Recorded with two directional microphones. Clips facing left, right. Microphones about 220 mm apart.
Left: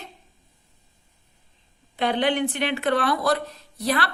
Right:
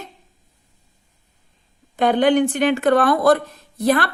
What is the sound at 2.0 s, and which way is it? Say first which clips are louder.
Speech: right 7 dB; 45° right (ahead or behind).